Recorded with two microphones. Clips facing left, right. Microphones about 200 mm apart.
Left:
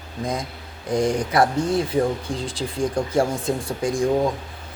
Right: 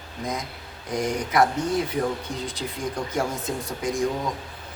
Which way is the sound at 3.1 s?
30° left (ahead or behind).